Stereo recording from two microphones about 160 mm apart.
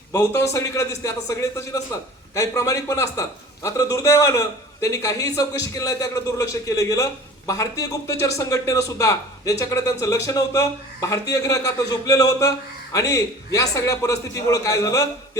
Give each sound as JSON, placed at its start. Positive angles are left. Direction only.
{"t": 0.1, "sound": "a man's voice", "side_deg": 20}